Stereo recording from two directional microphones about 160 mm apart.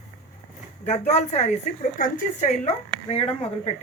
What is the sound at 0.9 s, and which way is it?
Speech, 45° left (ahead or behind).